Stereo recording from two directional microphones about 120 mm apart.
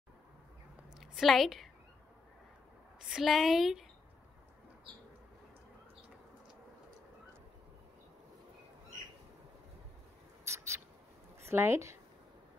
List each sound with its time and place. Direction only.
1.1 s a woman's voice: centre (ahead or behind)
3.1 s a woman's voice: centre (ahead or behind)
10.4 s mouse: 25° right (ahead or behind)
11.4 s a woman's voice: 20° right (ahead or behind)